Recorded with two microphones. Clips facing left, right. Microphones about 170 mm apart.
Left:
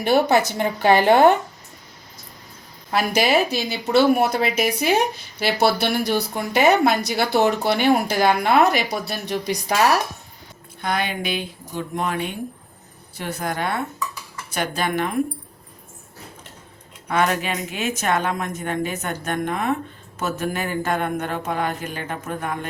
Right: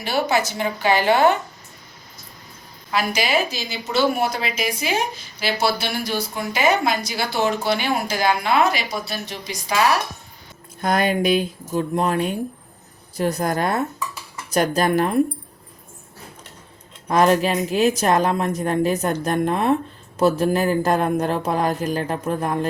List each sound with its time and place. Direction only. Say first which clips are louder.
0.0 s speech: left 4 dB; 55° left (ahead or behind)
3.1 s speech: left 5 dB; 55° left (ahead or behind)
10.8 s speech: right 5 dB; 45° right (ahead or behind)
17.1 s speech: right 5 dB; 35° right (ahead or behind)